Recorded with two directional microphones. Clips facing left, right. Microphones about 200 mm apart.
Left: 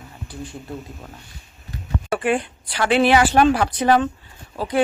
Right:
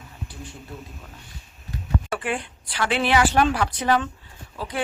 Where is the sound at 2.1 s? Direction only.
45° left (ahead or behind).